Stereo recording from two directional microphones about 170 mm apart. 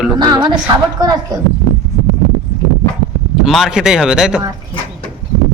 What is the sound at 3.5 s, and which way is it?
Speech, centre (ahead or behind).